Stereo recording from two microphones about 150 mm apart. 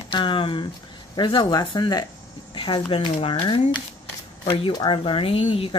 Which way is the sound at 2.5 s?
30° left (ahead or behind).